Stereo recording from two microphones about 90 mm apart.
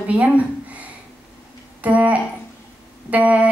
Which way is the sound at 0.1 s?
15° right (ahead or behind).